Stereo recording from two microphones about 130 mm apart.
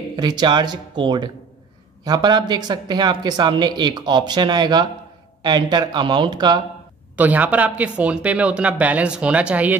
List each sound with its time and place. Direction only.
0.1 s speech: 35° right (ahead or behind)
7.2 s speech: 10° right (ahead or behind)